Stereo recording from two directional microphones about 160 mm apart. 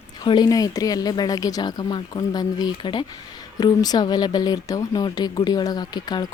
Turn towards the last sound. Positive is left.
turn(degrees=25)  # may be behind; listen again after turning